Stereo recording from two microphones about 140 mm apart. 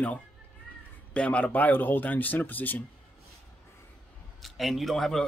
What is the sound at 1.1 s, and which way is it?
Speech, 10° left (ahead or behind).